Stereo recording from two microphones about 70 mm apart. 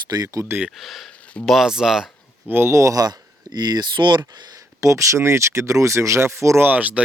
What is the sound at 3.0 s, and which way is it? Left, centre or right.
Speech, right.